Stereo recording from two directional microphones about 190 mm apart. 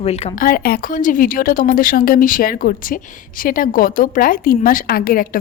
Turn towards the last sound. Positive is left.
turn(degrees=50)  # may be behind; listen again after turning